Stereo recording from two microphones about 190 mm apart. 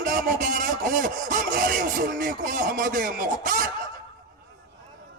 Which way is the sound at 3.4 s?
45° right (ahead or behind).